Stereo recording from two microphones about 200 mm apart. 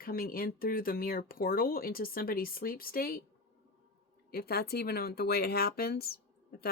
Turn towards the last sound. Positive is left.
turn(degrees=50)  # may be behind; listen again after turning